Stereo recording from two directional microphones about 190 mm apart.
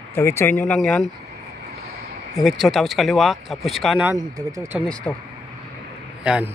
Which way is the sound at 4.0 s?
15° right (ahead or behind).